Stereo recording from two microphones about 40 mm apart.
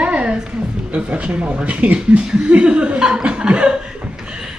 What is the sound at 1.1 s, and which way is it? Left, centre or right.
Speech, right.